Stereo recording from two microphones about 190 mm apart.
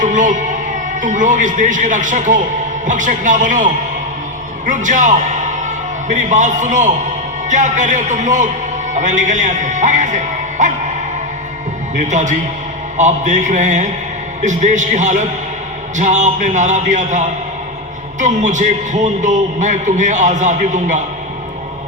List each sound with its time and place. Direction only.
0.0 s a man's voice: 40° right (ahead or behind)
11.9 s a man's voice: 40° right (ahead or behind)